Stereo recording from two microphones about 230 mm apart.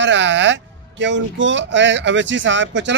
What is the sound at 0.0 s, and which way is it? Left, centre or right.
Speech, right.